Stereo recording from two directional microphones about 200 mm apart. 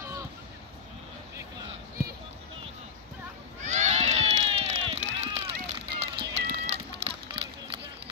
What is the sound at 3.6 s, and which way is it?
Run, 35° right (ahead or behind).